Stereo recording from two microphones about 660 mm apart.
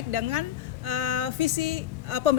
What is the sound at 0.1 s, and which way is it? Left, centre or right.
Speech, right.